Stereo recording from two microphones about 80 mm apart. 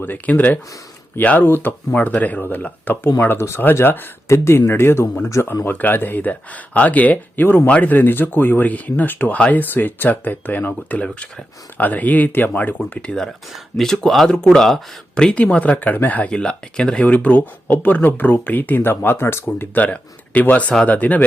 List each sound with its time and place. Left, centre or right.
0.0 s speech: left
1.5 s speech: left